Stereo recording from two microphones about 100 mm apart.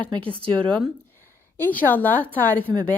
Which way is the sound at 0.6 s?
10° left (ahead or behind).